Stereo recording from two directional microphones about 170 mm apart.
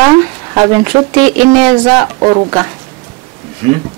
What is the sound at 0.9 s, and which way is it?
Speech, 30° right (ahead or behind).